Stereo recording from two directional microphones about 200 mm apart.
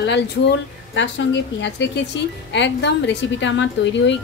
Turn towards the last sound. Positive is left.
turn(degrees=65)  # may be behind; listen again after turning